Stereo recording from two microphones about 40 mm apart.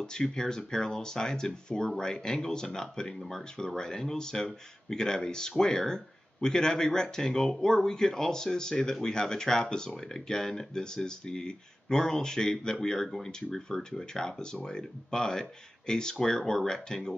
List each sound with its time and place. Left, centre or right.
0.0 s speech: centre